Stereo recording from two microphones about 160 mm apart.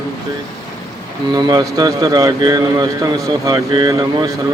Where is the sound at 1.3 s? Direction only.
20° right (ahead or behind).